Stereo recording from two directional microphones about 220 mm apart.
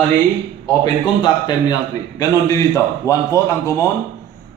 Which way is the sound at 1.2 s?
20° left (ahead or behind).